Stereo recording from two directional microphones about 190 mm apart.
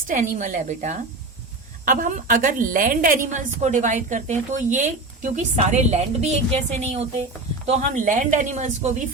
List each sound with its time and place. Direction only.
0.1 s a woman's voice: 40° right (ahead or behind)